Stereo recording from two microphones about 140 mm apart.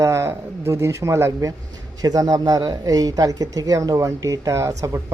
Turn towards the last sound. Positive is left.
turn(degrees=-25)  # may be behind; listen again after turning